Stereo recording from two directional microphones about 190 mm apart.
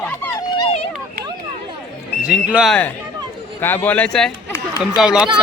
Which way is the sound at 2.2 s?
5° right (ahead or behind).